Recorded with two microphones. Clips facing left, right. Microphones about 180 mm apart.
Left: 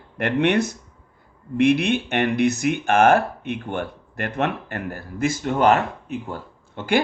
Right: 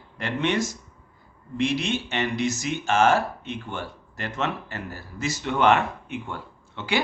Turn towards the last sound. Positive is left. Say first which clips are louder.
# left 5 dB
turn(degrees=50)  # may be behind; listen again after turning